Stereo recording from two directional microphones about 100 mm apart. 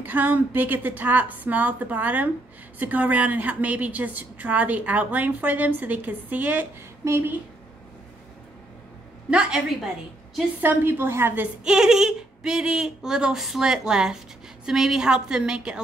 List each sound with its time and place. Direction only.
0.0 s a woman's voice: 15° right (ahead or behind)
9.3 s a woman's voice: 10° right (ahead or behind)
10.6 s a woman's voice: 20° right (ahead or behind)
11.6 s a woman's voice: 5° right (ahead or behind)